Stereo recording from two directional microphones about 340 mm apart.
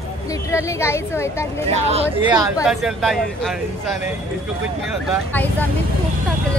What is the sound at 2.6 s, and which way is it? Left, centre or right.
Speech, centre.